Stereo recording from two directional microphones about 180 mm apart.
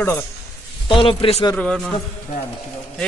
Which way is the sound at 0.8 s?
30° left (ahead or behind).